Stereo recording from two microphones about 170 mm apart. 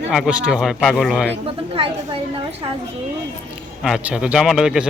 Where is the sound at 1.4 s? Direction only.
30° right (ahead or behind).